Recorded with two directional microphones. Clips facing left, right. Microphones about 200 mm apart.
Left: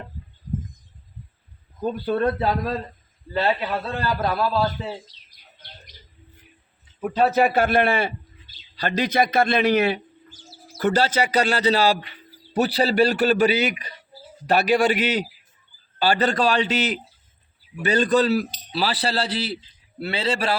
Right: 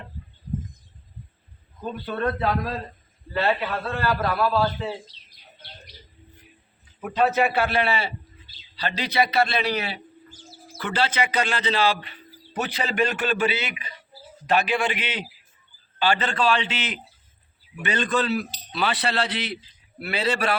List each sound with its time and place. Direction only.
1.8 s speech: 40° left (ahead or behind)
3.6 s a man's voice: 20° left (ahead or behind)
7.0 s a man's voice: 35° left (ahead or behind)